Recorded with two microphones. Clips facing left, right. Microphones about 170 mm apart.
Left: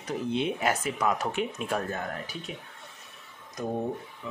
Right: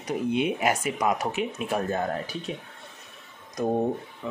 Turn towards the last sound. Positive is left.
turn(degrees=-30)  # may be behind; listen again after turning